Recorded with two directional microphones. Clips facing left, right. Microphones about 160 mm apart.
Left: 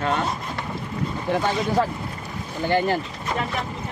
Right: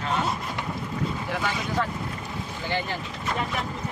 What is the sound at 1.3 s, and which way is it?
Speech, 25° left (ahead or behind).